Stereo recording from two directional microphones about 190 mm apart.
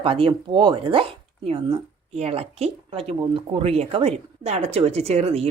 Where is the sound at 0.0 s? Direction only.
30° right (ahead or behind).